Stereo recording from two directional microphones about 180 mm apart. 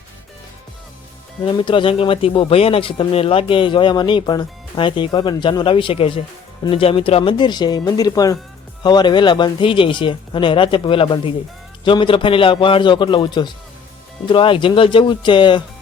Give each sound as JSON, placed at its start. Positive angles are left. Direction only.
{"t": 1.4, "sound": "speech", "side_deg": 25}